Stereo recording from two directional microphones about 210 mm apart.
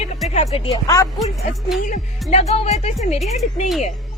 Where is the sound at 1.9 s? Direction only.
30° left (ahead or behind).